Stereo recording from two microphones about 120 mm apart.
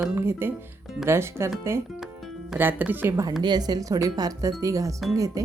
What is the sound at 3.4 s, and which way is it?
A woman's voice, 35° right (ahead or behind).